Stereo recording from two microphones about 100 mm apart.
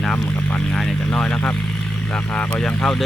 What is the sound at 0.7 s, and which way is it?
Speech, 10° left (ahead or behind).